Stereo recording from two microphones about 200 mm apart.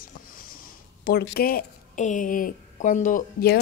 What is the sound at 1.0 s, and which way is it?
A woman's voice, 50° left (ahead or behind).